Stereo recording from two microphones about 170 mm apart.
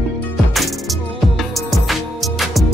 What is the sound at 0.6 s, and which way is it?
Music, centre (ahead or behind).